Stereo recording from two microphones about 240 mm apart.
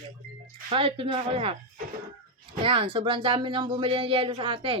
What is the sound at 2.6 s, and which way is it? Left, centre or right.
Speech, right.